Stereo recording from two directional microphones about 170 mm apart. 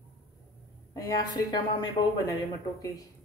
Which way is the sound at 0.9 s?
25° left (ahead or behind).